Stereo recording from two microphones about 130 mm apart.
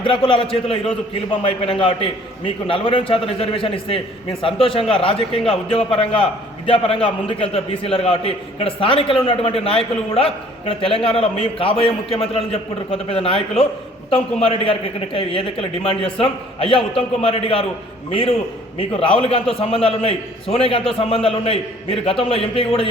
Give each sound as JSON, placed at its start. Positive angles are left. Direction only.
{"t": 0.0, "sound": "a man's voice", "side_deg": 40}